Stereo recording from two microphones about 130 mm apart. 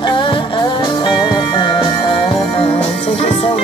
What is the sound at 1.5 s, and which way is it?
Music, 40° left (ahead or behind).